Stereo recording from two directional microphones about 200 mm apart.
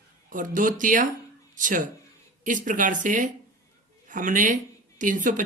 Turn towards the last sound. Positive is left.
turn(degrees=-40)  # may be behind; listen again after turning